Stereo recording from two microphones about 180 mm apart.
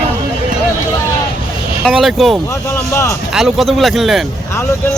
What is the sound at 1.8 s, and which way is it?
Speech, centre (ahead or behind).